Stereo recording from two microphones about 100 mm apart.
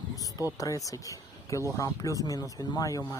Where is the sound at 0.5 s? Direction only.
35° left (ahead or behind).